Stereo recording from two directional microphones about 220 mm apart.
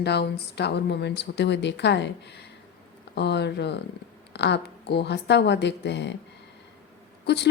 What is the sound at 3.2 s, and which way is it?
A woman's voice, 50° left (ahead or behind).